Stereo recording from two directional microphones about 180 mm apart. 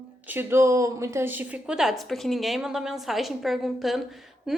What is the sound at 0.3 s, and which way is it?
A woman's voice, 15° right (ahead or behind).